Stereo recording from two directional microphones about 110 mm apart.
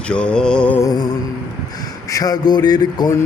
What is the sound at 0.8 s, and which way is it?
Speech, 35° left (ahead or behind).